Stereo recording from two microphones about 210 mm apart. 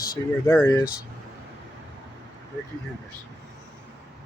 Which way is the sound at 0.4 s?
10° left (ahead or behind).